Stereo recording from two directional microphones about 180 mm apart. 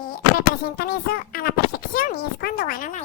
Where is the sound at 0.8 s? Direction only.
55° left (ahead or behind).